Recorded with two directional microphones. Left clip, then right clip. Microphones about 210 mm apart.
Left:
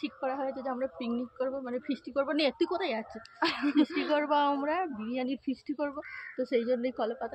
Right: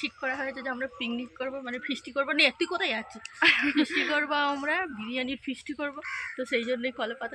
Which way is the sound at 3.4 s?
5° right (ahead or behind).